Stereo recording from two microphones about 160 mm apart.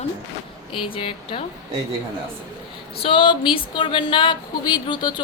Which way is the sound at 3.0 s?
30° left (ahead or behind).